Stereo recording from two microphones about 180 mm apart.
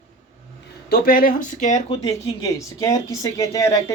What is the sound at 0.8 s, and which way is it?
Speech, 55° left (ahead or behind).